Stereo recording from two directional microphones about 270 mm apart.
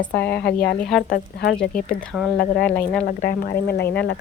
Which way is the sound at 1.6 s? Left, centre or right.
Left.